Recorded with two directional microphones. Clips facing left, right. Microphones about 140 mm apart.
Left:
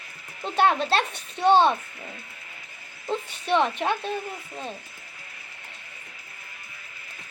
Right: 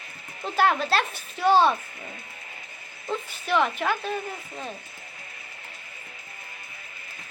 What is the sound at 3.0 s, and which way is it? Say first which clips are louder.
A woman's voice: left 2 dB; 30° left (ahead or behind).